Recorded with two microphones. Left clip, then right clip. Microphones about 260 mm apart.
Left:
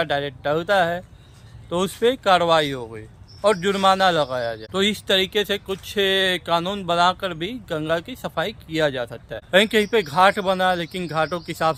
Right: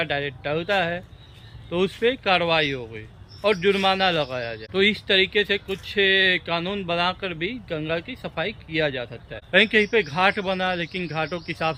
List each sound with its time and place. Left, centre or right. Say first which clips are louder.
0.0 s a man's voice: left 3 dB; centre